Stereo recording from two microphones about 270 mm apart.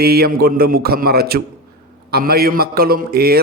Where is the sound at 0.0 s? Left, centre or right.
Right.